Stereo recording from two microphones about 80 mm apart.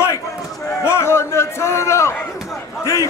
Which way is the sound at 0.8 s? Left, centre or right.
Left.